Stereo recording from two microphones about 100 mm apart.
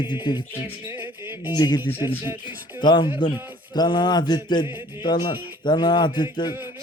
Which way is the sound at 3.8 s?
45° left (ahead or behind).